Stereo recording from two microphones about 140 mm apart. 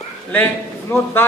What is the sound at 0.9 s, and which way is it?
Speech, 15° left (ahead or behind).